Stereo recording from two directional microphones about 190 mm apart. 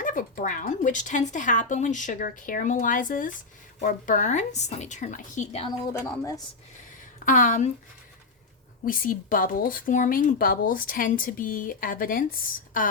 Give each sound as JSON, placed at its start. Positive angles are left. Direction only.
{"t": 0.0, "sound": "a woman's voice", "side_deg": 45}
{"t": 5.9, "sound": "a woman's voice", "side_deg": 15}
{"t": 7.3, "sound": "speech", "side_deg": 40}
{"t": 8.8, "sound": "speech", "side_deg": 45}